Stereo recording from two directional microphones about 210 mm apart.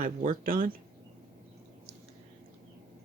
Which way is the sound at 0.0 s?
40° right (ahead or behind).